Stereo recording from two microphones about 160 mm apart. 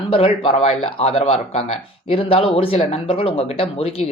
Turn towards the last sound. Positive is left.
turn(degrees=35)  # may be behind; listen again after turning